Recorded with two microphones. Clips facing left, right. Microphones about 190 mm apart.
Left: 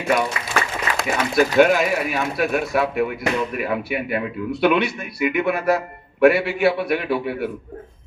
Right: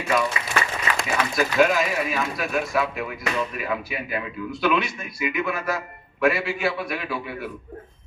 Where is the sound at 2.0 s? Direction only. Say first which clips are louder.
Left 5 dB; 65° left (ahead or behind).